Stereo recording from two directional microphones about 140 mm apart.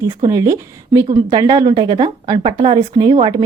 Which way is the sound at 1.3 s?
35° right (ahead or behind).